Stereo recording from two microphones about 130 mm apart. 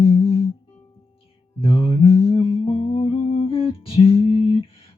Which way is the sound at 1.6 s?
45° left (ahead or behind).